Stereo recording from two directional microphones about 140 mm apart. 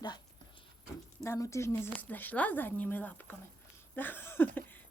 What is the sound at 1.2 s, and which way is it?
Speech, 20° left (ahead or behind).